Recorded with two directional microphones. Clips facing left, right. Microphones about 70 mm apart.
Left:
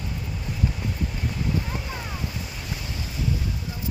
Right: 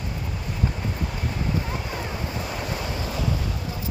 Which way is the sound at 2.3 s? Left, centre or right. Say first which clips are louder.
Right 5 dB; right.